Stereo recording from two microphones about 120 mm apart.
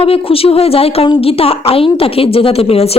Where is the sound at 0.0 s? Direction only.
50° left (ahead or behind).